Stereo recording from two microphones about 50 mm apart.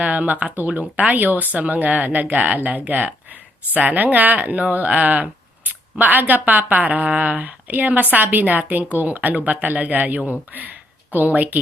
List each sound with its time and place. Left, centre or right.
0.0 s speech: right
10.5 s a sound: right
11.3 s speech: right